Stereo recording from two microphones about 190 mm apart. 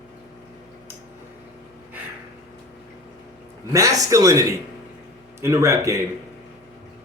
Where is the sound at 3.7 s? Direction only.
15° right (ahead or behind).